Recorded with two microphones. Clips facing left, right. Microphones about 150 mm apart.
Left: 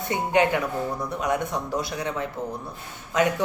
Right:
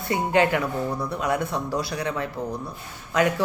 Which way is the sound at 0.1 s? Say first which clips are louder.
Right 1 dB; 20° left (ahead or behind).